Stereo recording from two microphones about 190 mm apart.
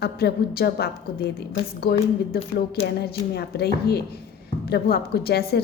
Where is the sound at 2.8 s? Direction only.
35° left (ahead or behind).